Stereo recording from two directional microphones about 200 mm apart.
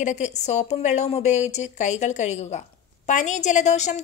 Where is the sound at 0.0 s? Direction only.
35° left (ahead or behind).